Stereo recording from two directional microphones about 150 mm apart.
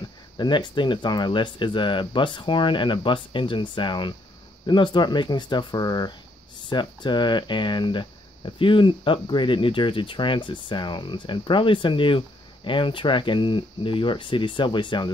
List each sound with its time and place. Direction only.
0.4 s speech: 30° left (ahead or behind)